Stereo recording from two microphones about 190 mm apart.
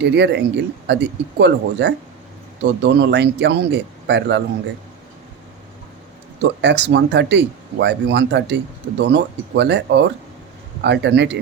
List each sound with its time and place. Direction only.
0.0 s speech: 65° right (ahead or behind)
6.6 s speech: 65° right (ahead or behind)